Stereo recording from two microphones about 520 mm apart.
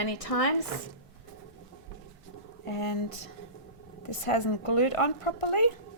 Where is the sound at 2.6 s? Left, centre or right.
Left.